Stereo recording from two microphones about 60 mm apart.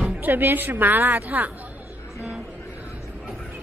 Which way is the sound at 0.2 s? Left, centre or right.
Right.